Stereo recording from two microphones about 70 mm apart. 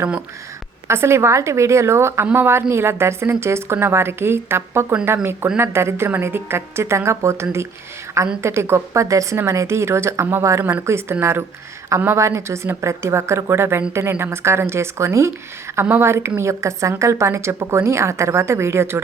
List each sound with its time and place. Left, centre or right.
0.9 s a woman's voice: right